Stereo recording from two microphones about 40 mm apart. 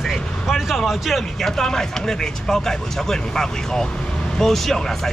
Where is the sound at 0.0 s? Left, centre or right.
Centre.